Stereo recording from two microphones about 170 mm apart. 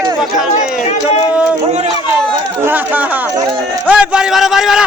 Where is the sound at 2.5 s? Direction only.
10° right (ahead or behind).